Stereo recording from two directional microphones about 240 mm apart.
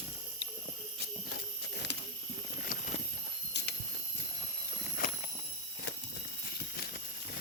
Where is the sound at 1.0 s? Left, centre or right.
Left.